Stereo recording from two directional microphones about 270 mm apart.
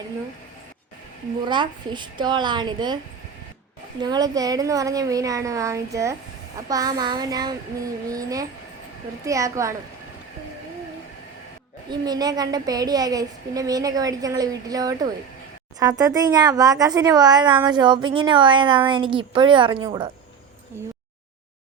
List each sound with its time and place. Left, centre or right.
1.5 s a woman's voice: centre
4.0 s a woman's voice: centre
11.9 s a woman's voice: centre